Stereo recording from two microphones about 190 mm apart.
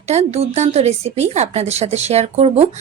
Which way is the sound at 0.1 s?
35° right (ahead or behind).